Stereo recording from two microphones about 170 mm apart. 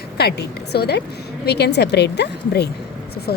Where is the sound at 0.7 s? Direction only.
75° left (ahead or behind).